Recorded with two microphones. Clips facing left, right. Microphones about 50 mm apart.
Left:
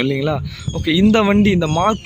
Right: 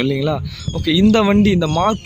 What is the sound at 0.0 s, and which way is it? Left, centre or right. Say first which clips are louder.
Speech: even; centre.